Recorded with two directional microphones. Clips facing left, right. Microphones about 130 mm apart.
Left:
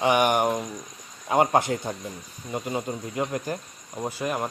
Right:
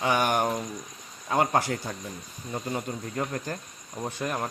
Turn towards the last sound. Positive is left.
turn(degrees=10)  # may be behind; listen again after turning